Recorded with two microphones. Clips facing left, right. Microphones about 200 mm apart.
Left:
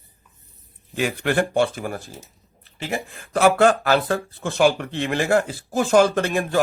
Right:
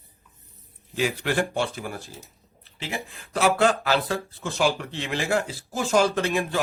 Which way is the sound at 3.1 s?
50° left (ahead or behind).